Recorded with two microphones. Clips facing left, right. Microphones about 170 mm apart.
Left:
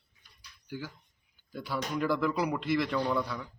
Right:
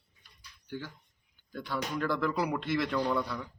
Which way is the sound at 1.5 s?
5° left (ahead or behind).